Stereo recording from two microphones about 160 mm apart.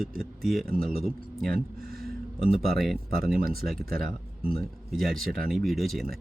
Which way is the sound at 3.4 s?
70° right (ahead or behind).